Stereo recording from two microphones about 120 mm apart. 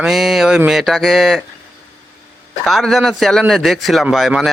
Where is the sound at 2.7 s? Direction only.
Centre (ahead or behind).